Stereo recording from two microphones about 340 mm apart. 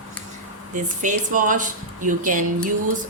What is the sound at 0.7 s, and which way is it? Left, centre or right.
Speech, right.